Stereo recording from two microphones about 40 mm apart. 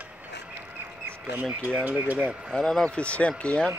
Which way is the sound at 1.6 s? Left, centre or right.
Right.